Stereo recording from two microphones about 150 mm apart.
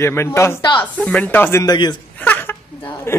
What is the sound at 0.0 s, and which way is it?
A man's voice, 15° left (ahead or behind).